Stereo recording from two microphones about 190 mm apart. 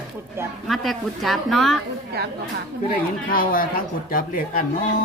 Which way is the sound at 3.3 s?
50° left (ahead or behind).